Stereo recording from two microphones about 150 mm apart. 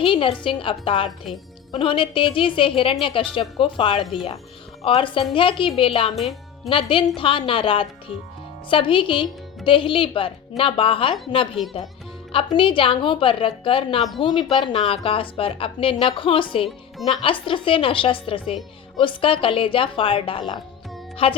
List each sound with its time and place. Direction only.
0.0 s a woman's voice: 35° left (ahead or behind)